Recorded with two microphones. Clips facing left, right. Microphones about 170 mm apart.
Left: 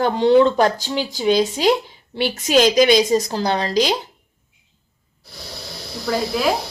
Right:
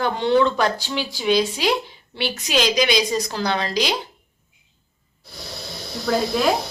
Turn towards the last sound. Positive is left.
turn(degrees=5)  # may be behind; listen again after turning